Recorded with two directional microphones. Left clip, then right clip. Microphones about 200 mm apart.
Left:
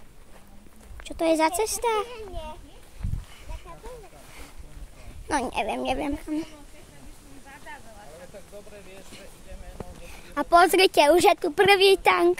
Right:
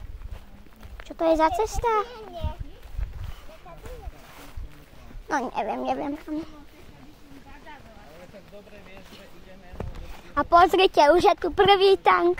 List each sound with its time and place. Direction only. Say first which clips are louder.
1.0 s a woman's voice: right 1 dB; 10° left (ahead or behind)
5.3 s a woman's voice: even; 15° left (ahead or behind)
9.8 s a sound: right 3 dB; 55° right (ahead or behind)
10.3 s a woman's voice: right 1 dB; 5° left (ahead or behind)